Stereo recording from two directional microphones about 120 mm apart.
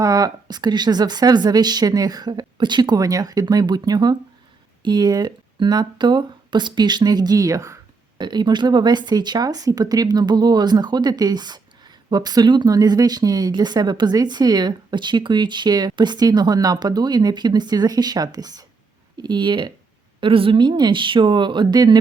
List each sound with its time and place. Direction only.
0.0 s speech: 30° right (ahead or behind)
8.2 s speech: 35° right (ahead or behind)